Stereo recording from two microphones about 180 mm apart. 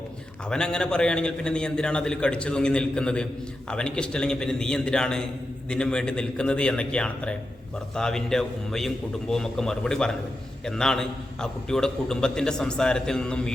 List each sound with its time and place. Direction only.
0.5 s a man's voice: 5° left (ahead or behind)